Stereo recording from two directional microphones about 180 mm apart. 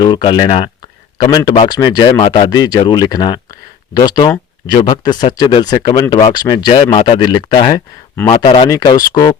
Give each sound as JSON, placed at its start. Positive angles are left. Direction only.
{"t": 0.0, "sound": "speech", "side_deg": 25}